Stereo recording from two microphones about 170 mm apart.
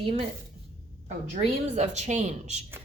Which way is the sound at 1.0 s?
40° right (ahead or behind).